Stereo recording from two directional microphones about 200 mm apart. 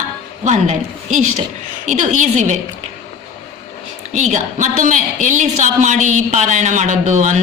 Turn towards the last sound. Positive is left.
turn(degrees=-35)  # may be behind; listen again after turning